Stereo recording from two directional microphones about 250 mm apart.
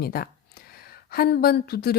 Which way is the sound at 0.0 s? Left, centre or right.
Left.